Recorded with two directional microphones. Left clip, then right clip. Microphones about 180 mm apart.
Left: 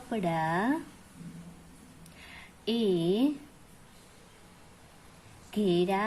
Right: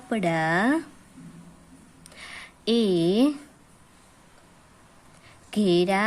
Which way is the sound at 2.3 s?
35° right (ahead or behind).